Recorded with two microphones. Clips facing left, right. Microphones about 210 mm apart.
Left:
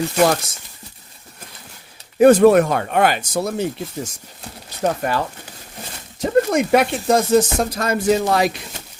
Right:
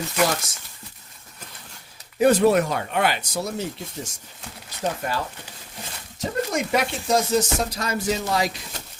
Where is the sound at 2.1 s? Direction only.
50° left (ahead or behind).